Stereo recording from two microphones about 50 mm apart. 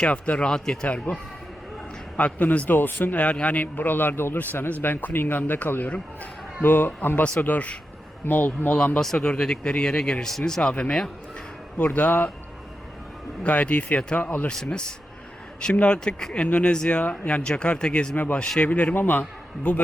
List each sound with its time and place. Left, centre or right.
0.1 s speech: left
1.1 s speech: left
2.1 s speech: left
3.3 s speech: left
7.4 s speech: left
9.0 s speech: centre
11.9 s speech: left
13.4 s speech: left
14.4 s speech: centre
16.5 s speech: left
16.7 s speech: centre
17.0 s speech: left
18.1 s speech: left
18.9 s speech: left